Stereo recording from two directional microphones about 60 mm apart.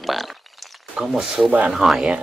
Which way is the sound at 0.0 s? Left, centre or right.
Centre.